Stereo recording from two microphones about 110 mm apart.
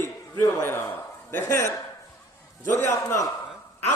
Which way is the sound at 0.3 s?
20° left (ahead or behind).